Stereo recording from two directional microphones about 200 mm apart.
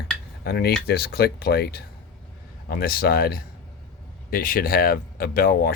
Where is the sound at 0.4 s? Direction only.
55° left (ahead or behind).